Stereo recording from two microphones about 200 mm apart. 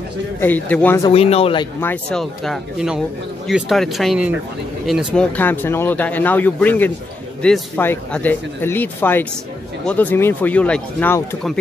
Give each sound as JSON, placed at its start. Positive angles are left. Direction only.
{"t": 0.4, "sound": "speech", "side_deg": 10}
{"t": 1.0, "sound": "speech", "side_deg": 30}
{"t": 1.8, "sound": "speech", "side_deg": 5}